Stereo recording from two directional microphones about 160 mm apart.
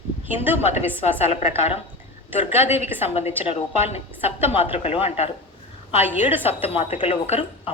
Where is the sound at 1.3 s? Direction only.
40° left (ahead or behind).